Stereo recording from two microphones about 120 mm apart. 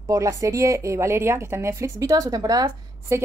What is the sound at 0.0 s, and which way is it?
A woman's voice, 25° right (ahead or behind).